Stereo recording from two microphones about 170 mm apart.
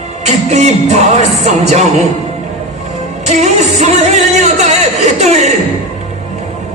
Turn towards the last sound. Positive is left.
turn(degrees=-40)  # may be behind; listen again after turning